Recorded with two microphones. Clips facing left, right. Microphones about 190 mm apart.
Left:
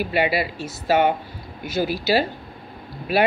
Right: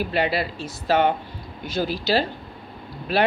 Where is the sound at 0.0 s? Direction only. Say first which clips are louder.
Left 2 dB; 10° left (ahead or behind).